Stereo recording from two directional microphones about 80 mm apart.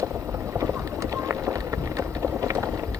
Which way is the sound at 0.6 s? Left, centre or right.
Right.